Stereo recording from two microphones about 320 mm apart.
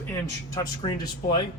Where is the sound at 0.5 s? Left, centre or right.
Centre.